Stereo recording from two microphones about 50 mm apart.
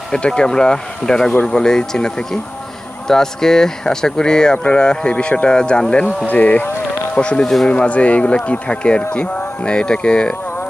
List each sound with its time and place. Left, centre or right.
0.1 s speech: centre
7.4 s speech: centre
7.7 s speech: left